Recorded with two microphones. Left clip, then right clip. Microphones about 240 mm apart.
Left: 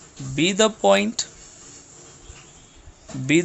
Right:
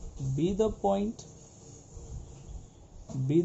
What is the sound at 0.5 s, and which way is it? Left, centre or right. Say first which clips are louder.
Speech: left 11 dB; left.